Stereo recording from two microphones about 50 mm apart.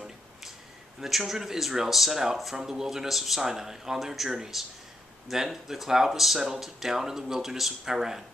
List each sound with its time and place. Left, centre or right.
1.0 s speech: centre